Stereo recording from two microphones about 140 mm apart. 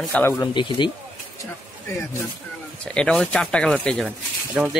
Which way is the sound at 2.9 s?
5° left (ahead or behind).